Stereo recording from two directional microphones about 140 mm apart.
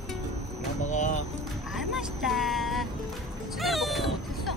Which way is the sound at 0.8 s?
60° left (ahead or behind).